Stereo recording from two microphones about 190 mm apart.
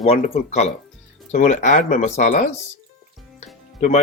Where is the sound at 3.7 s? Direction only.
40° left (ahead or behind).